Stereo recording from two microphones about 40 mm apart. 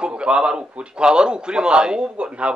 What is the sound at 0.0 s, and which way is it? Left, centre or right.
A man's voice, right.